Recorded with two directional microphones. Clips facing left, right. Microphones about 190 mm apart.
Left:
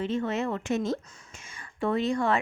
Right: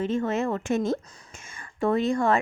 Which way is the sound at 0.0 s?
45° right (ahead or behind).